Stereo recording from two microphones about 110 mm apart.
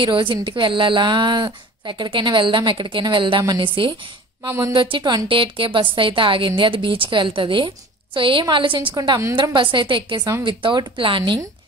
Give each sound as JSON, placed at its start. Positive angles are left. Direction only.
{"t": 0.0, "sound": "a woman's voice", "side_deg": -50}
{"t": 4.5, "sound": "speech", "side_deg": -25}
{"t": 4.7, "sound": "a woman's voice", "side_deg": -50}